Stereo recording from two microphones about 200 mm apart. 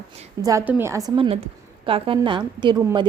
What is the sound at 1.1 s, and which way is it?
A woman's voice, 25° right (ahead or behind).